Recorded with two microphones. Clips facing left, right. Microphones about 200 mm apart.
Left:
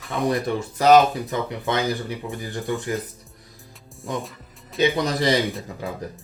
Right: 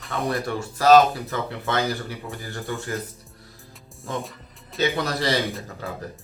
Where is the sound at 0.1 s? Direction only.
15° left (ahead or behind).